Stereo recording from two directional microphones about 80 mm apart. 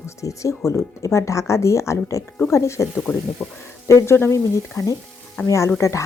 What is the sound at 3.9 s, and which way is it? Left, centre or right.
Speech, left.